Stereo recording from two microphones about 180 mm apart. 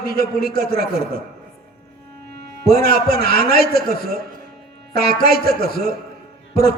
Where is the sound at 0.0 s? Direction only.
60° left (ahead or behind).